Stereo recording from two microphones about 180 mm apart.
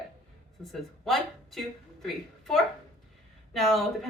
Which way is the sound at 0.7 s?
Centre (ahead or behind).